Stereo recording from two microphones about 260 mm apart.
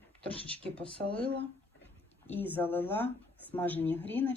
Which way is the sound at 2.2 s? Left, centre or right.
Centre.